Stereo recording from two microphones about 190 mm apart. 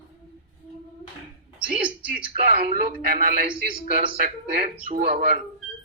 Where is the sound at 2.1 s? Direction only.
45° right (ahead or behind).